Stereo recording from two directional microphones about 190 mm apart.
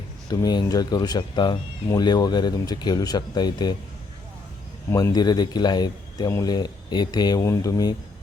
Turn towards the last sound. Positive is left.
turn(degrees=20)  # may be behind; listen again after turning